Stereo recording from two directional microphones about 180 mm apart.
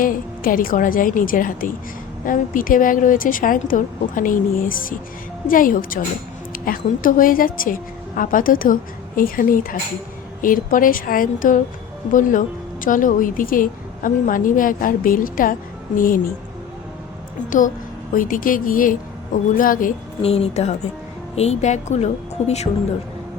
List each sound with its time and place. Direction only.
0.0 s speech: 50° left (ahead or behind)
18.1 s speech: 50° left (ahead or behind)
20.2 s speech: 35° left (ahead or behind)